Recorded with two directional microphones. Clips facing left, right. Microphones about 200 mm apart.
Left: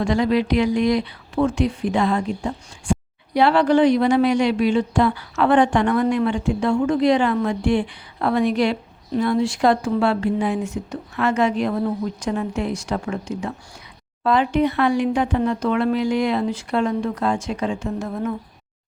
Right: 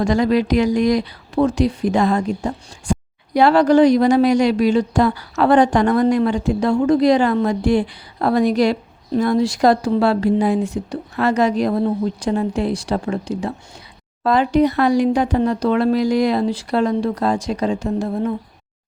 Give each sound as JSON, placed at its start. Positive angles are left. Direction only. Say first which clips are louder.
{"t": 0.0, "sound": "speech", "louder": "right 3 dB", "side_deg": -40}